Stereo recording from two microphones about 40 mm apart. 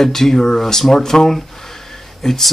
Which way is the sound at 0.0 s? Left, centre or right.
Centre.